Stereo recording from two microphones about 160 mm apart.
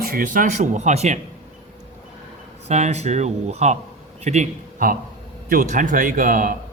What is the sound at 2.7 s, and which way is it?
A man's voice, 45° right (ahead or behind).